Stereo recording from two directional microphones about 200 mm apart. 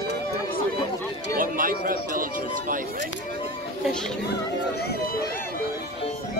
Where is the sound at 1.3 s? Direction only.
45° right (ahead or behind).